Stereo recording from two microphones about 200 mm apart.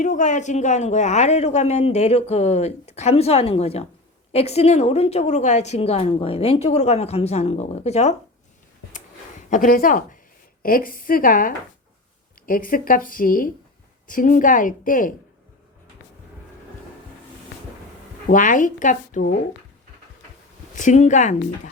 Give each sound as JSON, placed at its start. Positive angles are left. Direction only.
{"t": 0.0, "sound": "a woman's voice", "side_deg": 40}
{"t": 9.5, "sound": "a woman's voice", "side_deg": 45}
{"t": 18.3, "sound": "a woman's voice", "side_deg": 40}
{"t": 20.7, "sound": "a woman's voice", "side_deg": 35}